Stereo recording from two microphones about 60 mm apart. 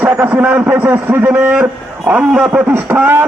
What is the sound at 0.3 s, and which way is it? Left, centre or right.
A man's voice, right.